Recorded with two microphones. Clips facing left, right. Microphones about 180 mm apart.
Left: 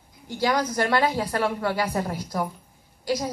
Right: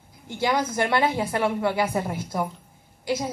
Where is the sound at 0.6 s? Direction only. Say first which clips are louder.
Even; 25° right (ahead or behind).